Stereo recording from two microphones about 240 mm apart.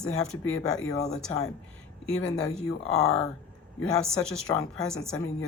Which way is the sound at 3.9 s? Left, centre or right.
Centre.